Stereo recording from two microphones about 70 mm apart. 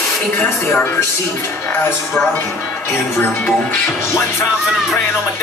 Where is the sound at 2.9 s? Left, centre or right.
Left.